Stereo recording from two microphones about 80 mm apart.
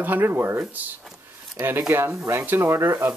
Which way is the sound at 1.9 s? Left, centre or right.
Right.